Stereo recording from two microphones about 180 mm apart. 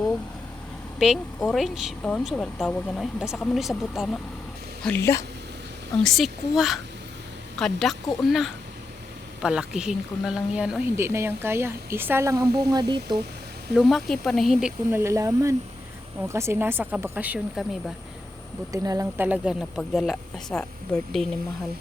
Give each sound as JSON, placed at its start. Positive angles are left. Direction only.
{"t": 0.9, "sound": "speech", "side_deg": 0}
{"t": 4.8, "sound": "a woman's voice", "side_deg": 10}
{"t": 6.0, "sound": "speech", "side_deg": 0}
{"t": 13.7, "sound": "speech", "side_deg": 0}
{"t": 14.8, "sound": "speech", "side_deg": -15}
{"t": 18.7, "sound": "speech", "side_deg": -20}